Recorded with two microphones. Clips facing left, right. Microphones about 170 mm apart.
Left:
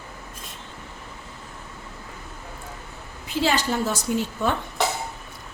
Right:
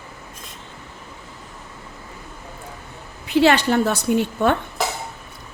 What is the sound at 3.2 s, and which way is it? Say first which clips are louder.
A woman's voice: right 7 dB; 70° right (ahead or behind).